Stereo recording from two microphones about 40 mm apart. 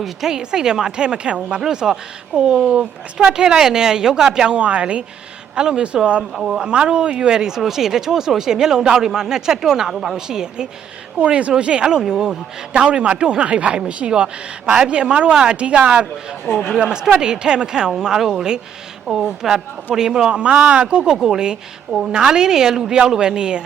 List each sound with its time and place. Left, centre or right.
0.0 s speech: centre
6.3 s speech: centre
6.7 s speech: right
11.2 s speech: right
11.5 s speech: right
11.9 s speech: centre
21.1 s speech: centre